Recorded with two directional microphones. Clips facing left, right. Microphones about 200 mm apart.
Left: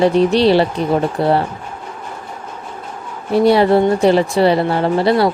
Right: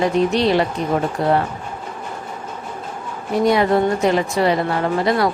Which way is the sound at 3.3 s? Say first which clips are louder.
Left 4 dB; 30° left (ahead or behind).